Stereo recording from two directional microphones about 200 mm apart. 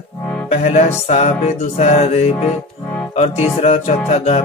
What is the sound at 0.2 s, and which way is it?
Music, 5° left (ahead or behind).